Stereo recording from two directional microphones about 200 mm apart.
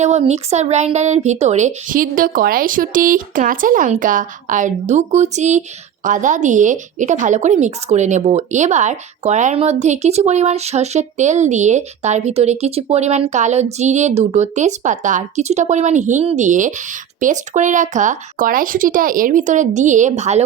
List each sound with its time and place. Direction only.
0.0 s speech: 35° right (ahead or behind)